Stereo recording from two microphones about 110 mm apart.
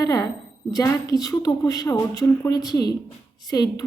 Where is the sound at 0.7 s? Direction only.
35° left (ahead or behind).